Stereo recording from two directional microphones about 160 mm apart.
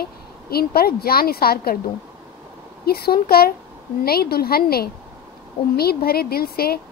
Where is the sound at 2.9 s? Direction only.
75° left (ahead or behind).